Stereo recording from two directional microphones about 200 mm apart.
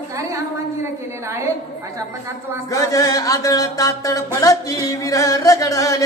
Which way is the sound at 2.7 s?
15° left (ahead or behind).